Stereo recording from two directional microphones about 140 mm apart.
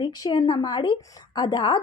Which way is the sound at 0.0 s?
30° left (ahead or behind).